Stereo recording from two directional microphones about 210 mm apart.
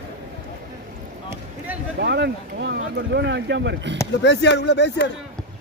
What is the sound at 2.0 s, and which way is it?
Speech, 55° right (ahead or behind).